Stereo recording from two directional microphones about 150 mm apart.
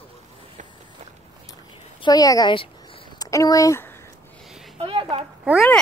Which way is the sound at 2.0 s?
25° left (ahead or behind).